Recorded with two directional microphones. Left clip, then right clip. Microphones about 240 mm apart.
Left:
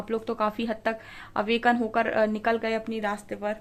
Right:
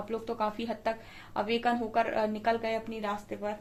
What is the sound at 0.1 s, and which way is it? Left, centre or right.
A woman's voice, left.